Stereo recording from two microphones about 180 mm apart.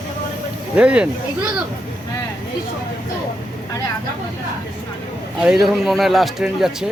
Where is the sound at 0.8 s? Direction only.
5° right (ahead or behind).